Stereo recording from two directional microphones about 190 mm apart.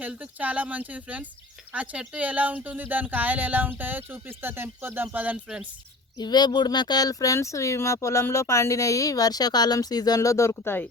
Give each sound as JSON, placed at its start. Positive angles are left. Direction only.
{"t": 0.0, "sound": "speech", "side_deg": -10}
{"t": 6.1, "sound": "speech", "side_deg": 20}